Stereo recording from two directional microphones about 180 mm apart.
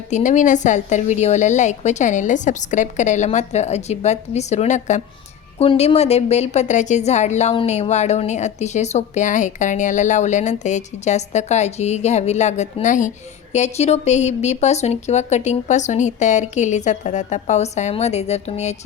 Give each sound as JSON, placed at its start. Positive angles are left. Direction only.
{"t": 0.1, "sound": "a woman's voice", "side_deg": 45}